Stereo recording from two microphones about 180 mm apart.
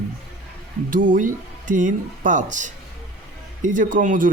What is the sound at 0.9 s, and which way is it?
Speech, 50° right (ahead or behind).